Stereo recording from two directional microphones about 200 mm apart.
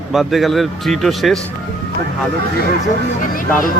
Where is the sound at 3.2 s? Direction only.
40° left (ahead or behind).